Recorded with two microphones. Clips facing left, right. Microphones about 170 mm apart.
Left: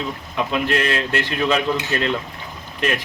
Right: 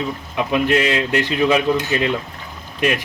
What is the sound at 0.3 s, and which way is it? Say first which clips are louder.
A man's voice: right 4 dB; 15° right (ahead or behind).